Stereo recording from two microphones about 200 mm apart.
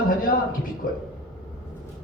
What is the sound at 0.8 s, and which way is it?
Speech, 45° left (ahead or behind).